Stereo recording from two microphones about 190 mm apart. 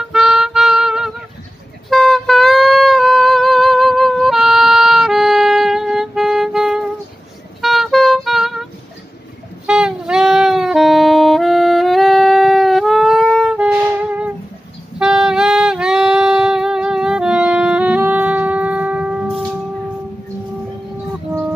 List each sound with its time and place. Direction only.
0.0 s harmonica: centre (ahead or behind)
1.9 s wind instrument: centre (ahead or behind)
7.6 s music: centre (ahead or behind)
9.7 s music: 5° right (ahead or behind)